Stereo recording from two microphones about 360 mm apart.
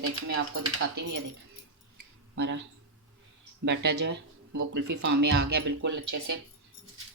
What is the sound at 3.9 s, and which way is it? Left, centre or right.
Speech, right.